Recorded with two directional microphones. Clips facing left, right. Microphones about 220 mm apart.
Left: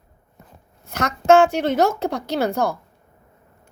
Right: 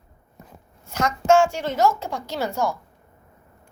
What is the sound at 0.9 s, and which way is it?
Speech, 65° left (ahead or behind).